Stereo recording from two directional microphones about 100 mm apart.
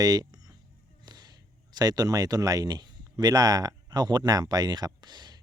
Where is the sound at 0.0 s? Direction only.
40° right (ahead or behind).